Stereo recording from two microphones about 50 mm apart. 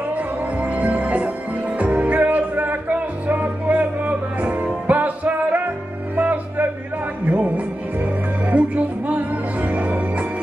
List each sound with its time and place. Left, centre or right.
0.1 s music: right